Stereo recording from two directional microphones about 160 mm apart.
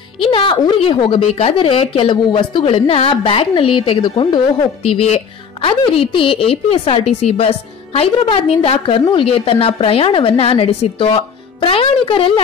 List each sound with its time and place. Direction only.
0.3 s a woman's voice: 30° left (ahead or behind)
4.8 s a woman's voice: 40° left (ahead or behind)